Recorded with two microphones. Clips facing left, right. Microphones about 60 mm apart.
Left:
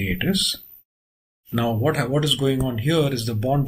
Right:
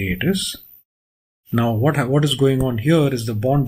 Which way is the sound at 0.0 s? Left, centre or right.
Centre.